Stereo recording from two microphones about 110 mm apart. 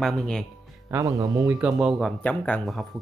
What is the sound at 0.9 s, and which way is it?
Speech, 30° right (ahead or behind).